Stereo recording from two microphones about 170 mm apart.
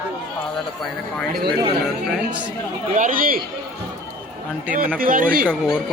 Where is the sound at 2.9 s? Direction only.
50° right (ahead or behind).